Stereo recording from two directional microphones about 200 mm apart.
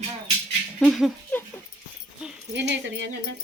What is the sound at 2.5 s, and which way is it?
Speech, 60° right (ahead or behind).